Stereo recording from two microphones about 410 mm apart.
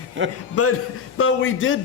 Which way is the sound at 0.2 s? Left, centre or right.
Right.